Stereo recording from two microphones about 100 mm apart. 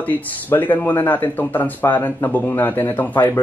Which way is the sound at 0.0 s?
20° left (ahead or behind).